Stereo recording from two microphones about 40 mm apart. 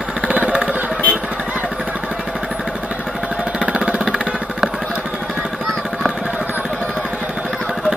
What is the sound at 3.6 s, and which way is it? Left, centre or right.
Vehicle, right.